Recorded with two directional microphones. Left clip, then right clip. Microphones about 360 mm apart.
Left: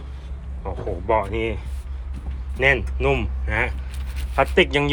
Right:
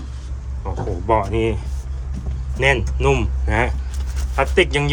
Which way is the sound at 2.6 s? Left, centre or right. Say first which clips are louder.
Right 1 dB; centre.